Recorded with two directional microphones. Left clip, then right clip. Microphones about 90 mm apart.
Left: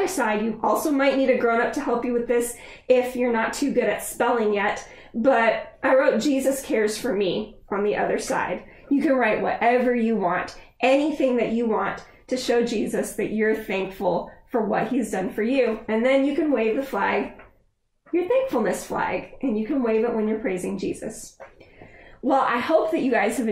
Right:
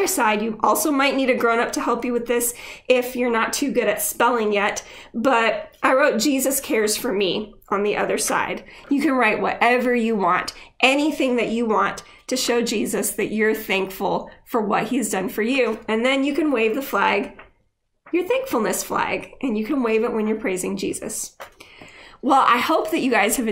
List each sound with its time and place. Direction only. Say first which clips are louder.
0.0 s a woman's voice: right 3 dB; 15° right (ahead or behind)
18.1 s a woman's voice: even; 15° right (ahead or behind)
22.2 s a woman's voice: right 5 dB; 15° right (ahead or behind)